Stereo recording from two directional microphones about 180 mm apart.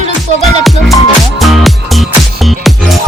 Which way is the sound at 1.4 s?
Centre (ahead or behind).